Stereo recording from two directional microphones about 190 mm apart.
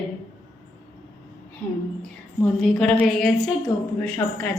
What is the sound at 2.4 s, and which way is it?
A woman's voice, 5° left (ahead or behind).